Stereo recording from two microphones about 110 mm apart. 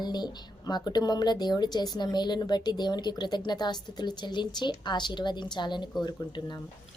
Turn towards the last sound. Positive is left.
turn(degrees=40)  # may be behind; listen again after turning